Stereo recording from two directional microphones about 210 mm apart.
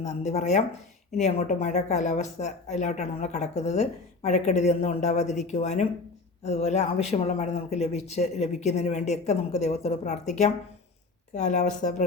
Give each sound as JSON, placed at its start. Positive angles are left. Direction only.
{"t": 0.0, "sound": "speech", "side_deg": 30}